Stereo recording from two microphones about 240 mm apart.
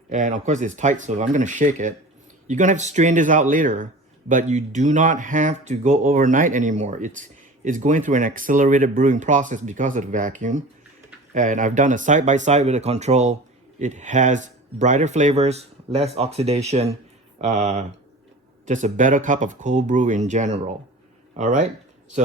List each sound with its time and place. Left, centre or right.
0.1 s speech: right